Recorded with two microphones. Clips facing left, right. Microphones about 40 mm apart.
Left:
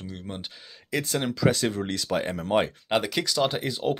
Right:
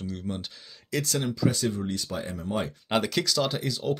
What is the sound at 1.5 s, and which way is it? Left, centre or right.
Speech, left.